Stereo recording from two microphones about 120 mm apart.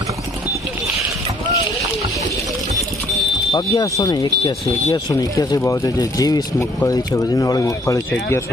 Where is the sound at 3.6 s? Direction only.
30° left (ahead or behind).